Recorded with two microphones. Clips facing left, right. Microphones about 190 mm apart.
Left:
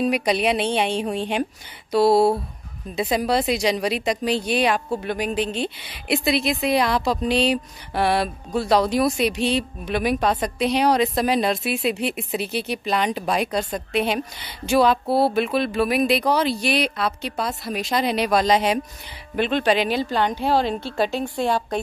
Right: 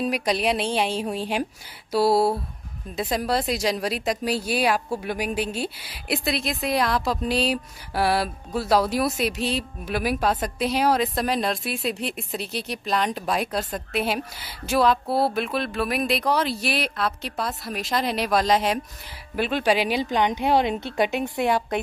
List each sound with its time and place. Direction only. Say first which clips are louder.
0.0 s a woman's voice: left 3 dB; centre (ahead or behind); by 21.5 s 20° right (ahead or behind)